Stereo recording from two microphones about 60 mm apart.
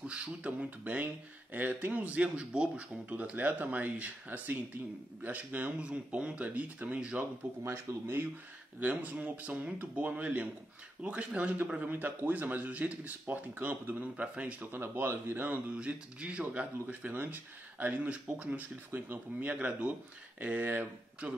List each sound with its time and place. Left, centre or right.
0.0 s speech: centre
7.2 s speech: right
8.7 s speech: right
11.9 s speech: right
14.1 s speech: right
14.8 s a man's voice: right
15.7 s speech: centre